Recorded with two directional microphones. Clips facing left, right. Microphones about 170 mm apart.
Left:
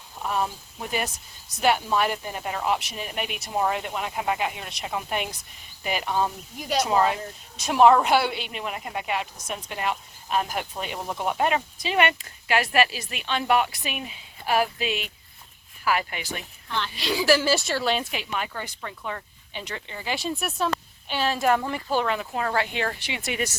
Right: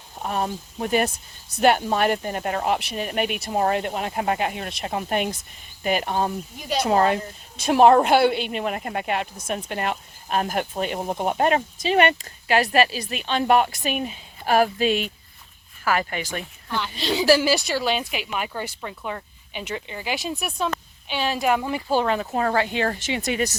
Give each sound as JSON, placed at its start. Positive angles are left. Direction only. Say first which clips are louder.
{"t": 0.2, "sound": "speech", "louder": "right 1 dB", "side_deg": -50}
{"t": 11.0, "sound": "speech", "louder": "right 2 dB", "side_deg": -40}
{"t": 16.6, "sound": "a woman's voice", "louder": "right 1 dB", "side_deg": -10}
{"t": 17.0, "sound": "speech", "louder": "right 3 dB", "side_deg": -30}
{"t": 17.4, "sound": "speech", "louder": "right 2 dB", "side_deg": -15}
{"t": 21.9, "sound": "speech", "louder": "right 4 dB", "side_deg": -30}